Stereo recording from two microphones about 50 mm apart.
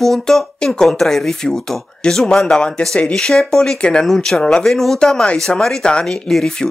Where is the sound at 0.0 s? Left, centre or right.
Centre.